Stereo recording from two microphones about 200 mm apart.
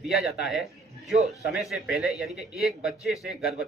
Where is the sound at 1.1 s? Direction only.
30° right (ahead or behind).